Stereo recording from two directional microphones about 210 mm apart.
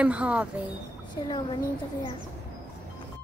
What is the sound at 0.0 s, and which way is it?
Speech, 5° right (ahead or behind).